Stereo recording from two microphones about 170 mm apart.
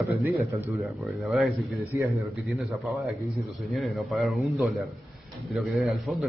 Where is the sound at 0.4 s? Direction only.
15° right (ahead or behind).